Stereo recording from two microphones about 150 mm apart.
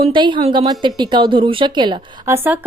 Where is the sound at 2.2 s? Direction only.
15° right (ahead or behind).